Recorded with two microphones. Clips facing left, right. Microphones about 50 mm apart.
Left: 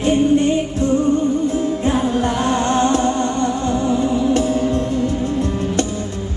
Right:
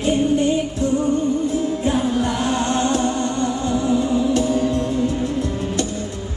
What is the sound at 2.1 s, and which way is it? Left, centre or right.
Music, left.